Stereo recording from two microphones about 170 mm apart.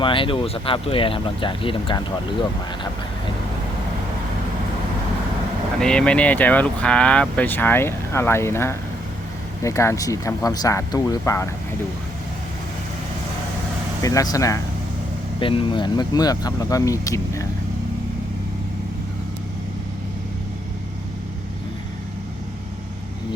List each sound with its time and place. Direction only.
0.0 s speech: 30° left (ahead or behind)
5.8 s speech: 5° left (ahead or behind)
14.0 s speech: 20° left (ahead or behind)
15.4 s speech: 30° left (ahead or behind)